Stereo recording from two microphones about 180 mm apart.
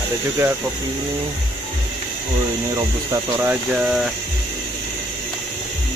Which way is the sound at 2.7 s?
15° right (ahead or behind).